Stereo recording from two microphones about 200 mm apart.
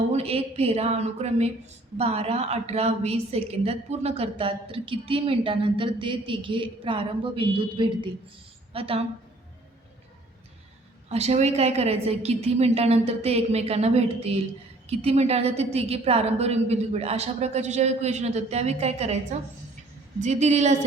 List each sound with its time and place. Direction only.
0.1 s a woman's voice: 30° right (ahead or behind)
11.1 s a woman's voice: 35° right (ahead or behind)
20.2 s a woman's voice: 35° right (ahead or behind)